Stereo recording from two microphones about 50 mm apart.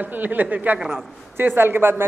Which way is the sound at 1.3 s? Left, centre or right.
Right.